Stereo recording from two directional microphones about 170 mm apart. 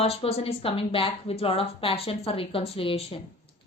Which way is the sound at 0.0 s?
35° left (ahead or behind).